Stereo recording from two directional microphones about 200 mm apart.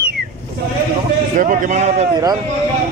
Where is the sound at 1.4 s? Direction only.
40° right (ahead or behind).